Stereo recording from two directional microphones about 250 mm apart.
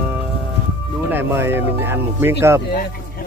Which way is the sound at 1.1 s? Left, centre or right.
Centre.